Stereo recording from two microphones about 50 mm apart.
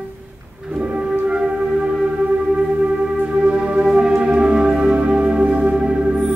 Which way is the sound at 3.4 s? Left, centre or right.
Right.